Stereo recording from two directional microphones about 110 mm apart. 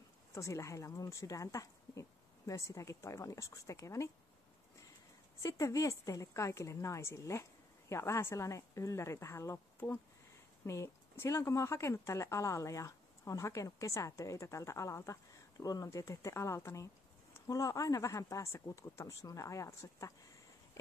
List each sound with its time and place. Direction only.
0.3 s speech: 25° left (ahead or behind)
5.4 s speech: 30° left (ahead or behind)
20.8 s a sound: 25° left (ahead or behind)